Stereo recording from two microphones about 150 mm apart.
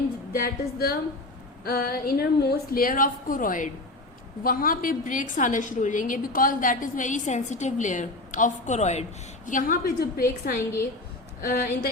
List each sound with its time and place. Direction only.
0.3 s a woman's voice: 90° left; by 9.0 s 50° left (ahead or behind)
9.5 s a woman's voice: 65° left (ahead or behind); by 10.2 s 90° left
11.3 s a woman's voice: 80° left